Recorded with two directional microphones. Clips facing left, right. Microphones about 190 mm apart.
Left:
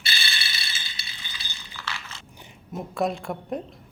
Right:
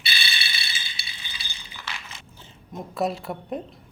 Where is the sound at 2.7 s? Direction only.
Centre (ahead or behind).